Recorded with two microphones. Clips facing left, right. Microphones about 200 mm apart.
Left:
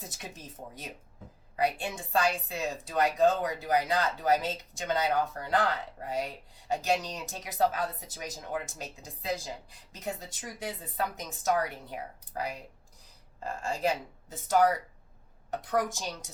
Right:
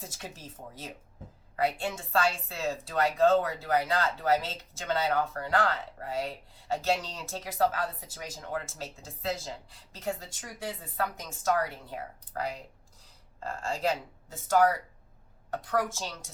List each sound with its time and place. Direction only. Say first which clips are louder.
0.1 s speech: right 1 dB; 20° left (ahead or behind)